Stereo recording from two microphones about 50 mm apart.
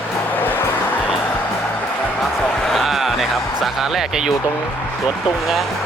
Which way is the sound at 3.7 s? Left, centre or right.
Centre.